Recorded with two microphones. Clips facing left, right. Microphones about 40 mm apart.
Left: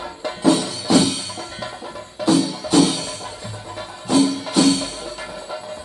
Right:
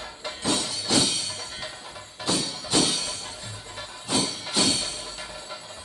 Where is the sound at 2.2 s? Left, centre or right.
Centre.